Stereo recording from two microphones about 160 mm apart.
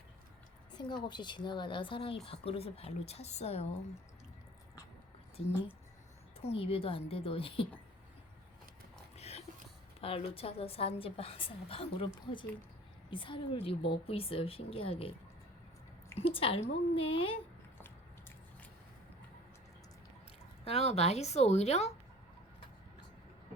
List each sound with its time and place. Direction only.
0.7 s a sound: 25° left (ahead or behind)
1.0 s a woman's voice: 30° left (ahead or behind)
6.4 s a woman's voice: 35° left (ahead or behind)
9.1 s a sound: 40° left (ahead or behind)
10.0 s a woman's voice: 35° left (ahead or behind)
16.1 s a woman's voice: 35° left (ahead or behind)
17.7 s biting: 15° left (ahead or behind)
20.7 s speech: 40° left (ahead or behind)